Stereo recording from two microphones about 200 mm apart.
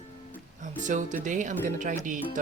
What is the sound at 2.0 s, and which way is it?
Music, 40° right (ahead or behind).